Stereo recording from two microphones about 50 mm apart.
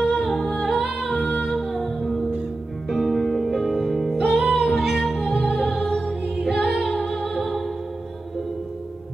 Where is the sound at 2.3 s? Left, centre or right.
Centre.